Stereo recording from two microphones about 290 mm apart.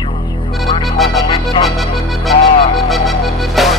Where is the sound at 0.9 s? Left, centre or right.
Centre.